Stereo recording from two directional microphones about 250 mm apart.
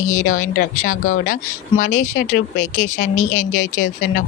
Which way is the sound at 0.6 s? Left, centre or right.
Left.